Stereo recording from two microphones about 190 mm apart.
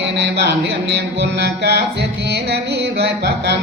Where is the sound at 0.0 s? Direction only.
65° right (ahead or behind).